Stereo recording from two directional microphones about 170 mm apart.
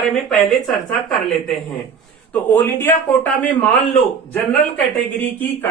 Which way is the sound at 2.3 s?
10° left (ahead or behind).